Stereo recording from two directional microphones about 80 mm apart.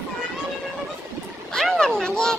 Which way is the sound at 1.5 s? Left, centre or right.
Centre.